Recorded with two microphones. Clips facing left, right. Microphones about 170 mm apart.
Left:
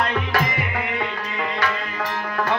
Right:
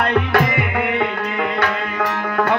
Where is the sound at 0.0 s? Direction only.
60° right (ahead or behind).